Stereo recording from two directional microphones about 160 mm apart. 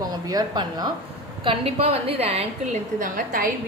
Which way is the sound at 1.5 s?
40° right (ahead or behind).